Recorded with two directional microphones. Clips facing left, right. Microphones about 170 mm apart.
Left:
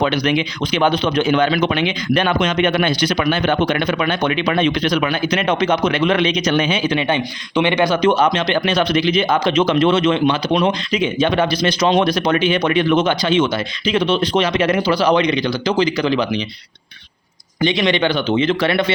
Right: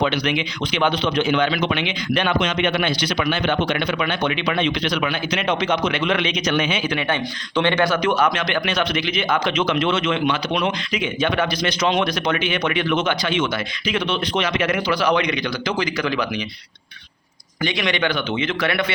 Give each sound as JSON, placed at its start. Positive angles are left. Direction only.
{"t": 0.0, "sound": "speech", "side_deg": 40}
{"t": 7.1, "sound": "speech", "side_deg": 15}
{"t": 17.6, "sound": "a man's voice", "side_deg": 25}